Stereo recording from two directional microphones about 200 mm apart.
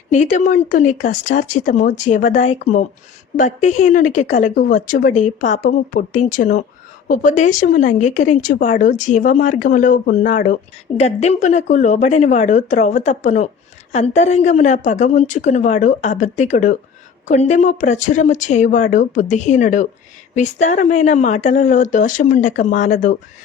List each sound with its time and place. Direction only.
0.1 s a woman's voice: 40° left (ahead or behind)